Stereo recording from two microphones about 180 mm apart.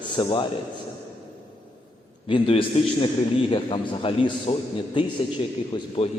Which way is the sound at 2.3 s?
30° left (ahead or behind).